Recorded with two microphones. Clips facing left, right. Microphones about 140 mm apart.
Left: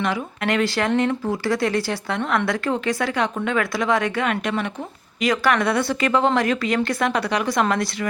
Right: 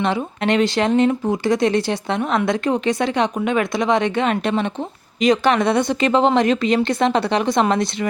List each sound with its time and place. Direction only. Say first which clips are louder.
0.0 s speech: right 4 dB; 25° right (ahead or behind)